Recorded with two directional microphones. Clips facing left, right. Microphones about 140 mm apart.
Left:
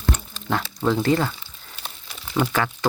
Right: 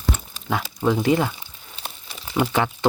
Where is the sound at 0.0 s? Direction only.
10° right (ahead or behind).